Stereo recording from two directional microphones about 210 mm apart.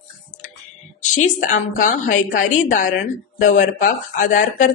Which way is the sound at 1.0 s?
35° left (ahead or behind).